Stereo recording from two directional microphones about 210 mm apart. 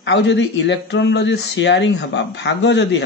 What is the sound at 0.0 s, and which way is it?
Speech, 55° left (ahead or behind).